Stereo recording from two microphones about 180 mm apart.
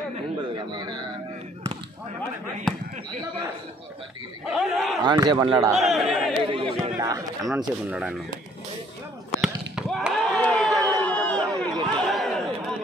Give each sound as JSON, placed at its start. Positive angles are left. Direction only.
{"t": 0.7, "sound": "speech", "side_deg": -25}
{"t": 2.6, "sound": "speech", "side_deg": 5}
{"t": 4.5, "sound": "speech", "side_deg": 0}
{"t": 5.0, "sound": "a man's voice", "side_deg": -25}
{"t": 5.8, "sound": "speech", "side_deg": 0}
{"t": 6.5, "sound": "a sound", "side_deg": -25}
{"t": 7.4, "sound": "speech", "side_deg": -5}
{"t": 9.3, "sound": "a sound", "side_deg": 0}
{"t": 11.1, "sound": "crowd", "side_deg": 5}
{"t": 11.9, "sound": "chatter", "side_deg": 5}